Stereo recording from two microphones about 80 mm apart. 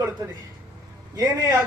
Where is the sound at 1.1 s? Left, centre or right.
Right.